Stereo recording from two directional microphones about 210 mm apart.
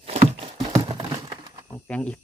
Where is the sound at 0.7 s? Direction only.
20° right (ahead or behind).